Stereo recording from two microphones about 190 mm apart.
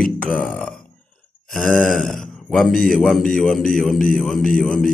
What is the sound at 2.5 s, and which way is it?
A man's voice, 5° left (ahead or behind).